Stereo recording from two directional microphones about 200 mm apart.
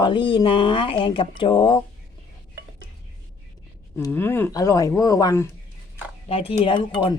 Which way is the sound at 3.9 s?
10° left (ahead or behind).